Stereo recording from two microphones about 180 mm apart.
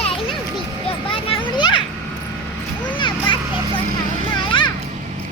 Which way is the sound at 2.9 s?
25° left (ahead or behind).